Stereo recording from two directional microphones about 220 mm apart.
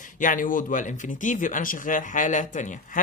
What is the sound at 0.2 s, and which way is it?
Speech, 35° left (ahead or behind).